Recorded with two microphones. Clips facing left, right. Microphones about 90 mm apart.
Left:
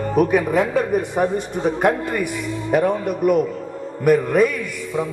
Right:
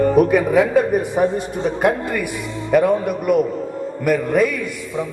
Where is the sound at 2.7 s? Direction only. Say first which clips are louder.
Right 3 dB; 60° right (ahead or behind).